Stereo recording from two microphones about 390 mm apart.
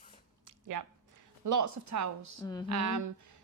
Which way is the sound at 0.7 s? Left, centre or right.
Right.